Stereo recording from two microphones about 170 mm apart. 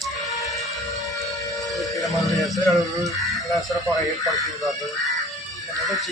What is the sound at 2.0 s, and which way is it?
Speech, 20° left (ahead or behind).